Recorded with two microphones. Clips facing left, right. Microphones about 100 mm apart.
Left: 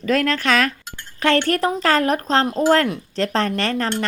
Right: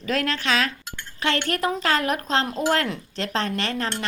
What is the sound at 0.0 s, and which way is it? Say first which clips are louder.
A woman's voice: left 6 dB; 50° left (ahead or behind).